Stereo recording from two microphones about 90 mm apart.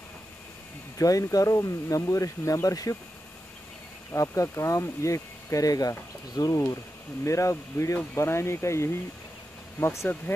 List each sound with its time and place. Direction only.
0.9 s speech: 40° left (ahead or behind)
4.1 s speech: 35° left (ahead or behind)